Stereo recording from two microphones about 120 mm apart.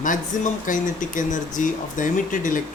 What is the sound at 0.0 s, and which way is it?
Speech, 90° left.